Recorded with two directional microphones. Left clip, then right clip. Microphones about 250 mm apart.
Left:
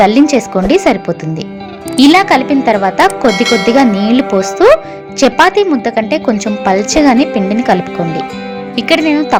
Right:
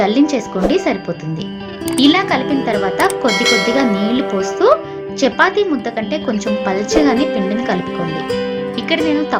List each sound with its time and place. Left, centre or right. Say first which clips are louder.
0.0 s a woman's voice: left 6 dB; left
3.2 s speech: left 4 dB; centre
3.8 s a woman's voice: left 6 dB; left